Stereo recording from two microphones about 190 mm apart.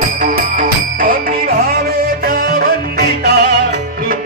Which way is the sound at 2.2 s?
55° right (ahead or behind).